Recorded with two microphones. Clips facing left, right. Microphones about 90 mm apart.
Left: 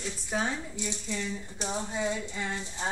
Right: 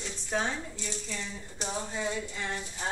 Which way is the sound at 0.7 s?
15° left (ahead or behind).